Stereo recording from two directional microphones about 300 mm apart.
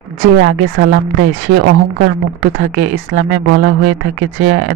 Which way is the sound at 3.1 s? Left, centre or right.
Right.